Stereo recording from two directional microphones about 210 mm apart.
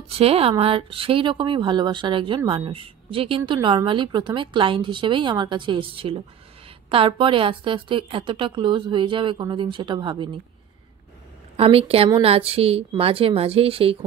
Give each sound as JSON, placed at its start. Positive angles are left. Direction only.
{"t": 0.1, "sound": "speech", "side_deg": -30}
{"t": 11.5, "sound": "speech", "side_deg": -25}